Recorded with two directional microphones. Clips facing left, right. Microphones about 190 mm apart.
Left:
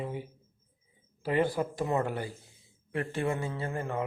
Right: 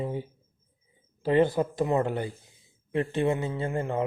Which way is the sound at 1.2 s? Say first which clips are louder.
Right 5 dB; 25° right (ahead or behind).